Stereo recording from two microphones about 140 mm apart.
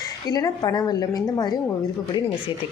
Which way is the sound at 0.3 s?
30° left (ahead or behind).